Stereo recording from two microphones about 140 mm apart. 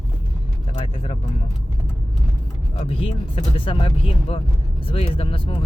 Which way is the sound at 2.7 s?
45° left (ahead or behind).